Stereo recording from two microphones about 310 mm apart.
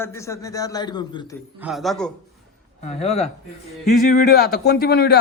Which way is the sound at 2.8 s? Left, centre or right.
Left.